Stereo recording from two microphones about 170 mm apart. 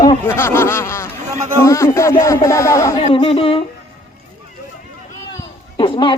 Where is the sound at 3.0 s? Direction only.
35° left (ahead or behind).